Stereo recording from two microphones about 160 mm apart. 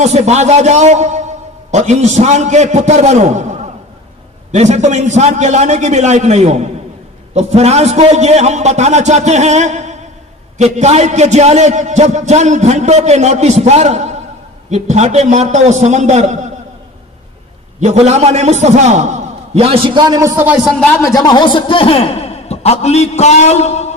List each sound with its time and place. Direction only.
0.0 s a man's voice: 45° right (ahead or behind)
17.7 s a man's voice: 45° right (ahead or behind); by 20.4 s 20° right (ahead or behind)
20.4 s speech: centre (ahead or behind)
21.0 s a man's voice: 25° left (ahead or behind); by 24.0 s 45° left (ahead or behind)